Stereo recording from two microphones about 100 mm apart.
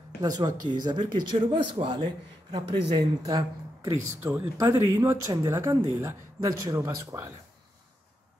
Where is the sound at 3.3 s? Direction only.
35° right (ahead or behind).